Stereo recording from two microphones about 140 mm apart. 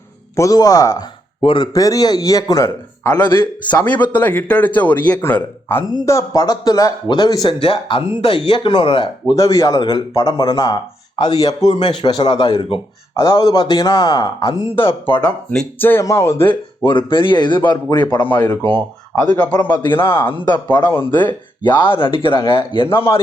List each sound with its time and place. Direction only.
0.3 s a man's voice: 25° left (ahead or behind)
1.4 s a man's voice: 35° left (ahead or behind)
9.3 s a man's voice: 20° left (ahead or behind)
15.2 s speech: 10° left (ahead or behind)
16.5 s speech: 35° left (ahead or behind)
18.2 s a man's voice: 20° left (ahead or behind)
21.6 s speech: 35° left (ahead or behind)